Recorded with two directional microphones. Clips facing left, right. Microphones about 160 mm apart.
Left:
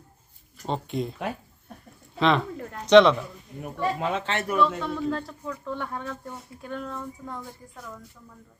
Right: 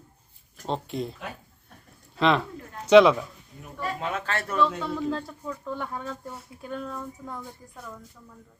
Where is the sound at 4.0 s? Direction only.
25° left (ahead or behind).